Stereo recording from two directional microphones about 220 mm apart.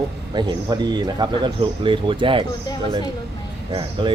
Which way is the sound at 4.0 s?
20° right (ahead or behind).